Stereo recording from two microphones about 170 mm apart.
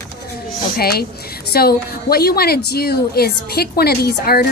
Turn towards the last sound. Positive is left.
turn(degrees=65)  # may be behind; listen again after turning